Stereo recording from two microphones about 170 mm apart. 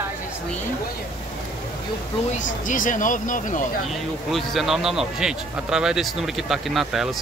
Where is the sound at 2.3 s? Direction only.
50° left (ahead or behind).